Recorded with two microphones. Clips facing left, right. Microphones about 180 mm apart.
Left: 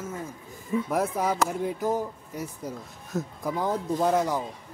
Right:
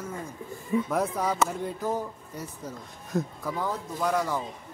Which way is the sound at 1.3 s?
Centre (ahead or behind).